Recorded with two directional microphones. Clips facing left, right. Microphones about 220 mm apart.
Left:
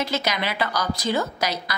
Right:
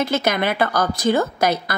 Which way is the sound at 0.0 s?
55° right (ahead or behind).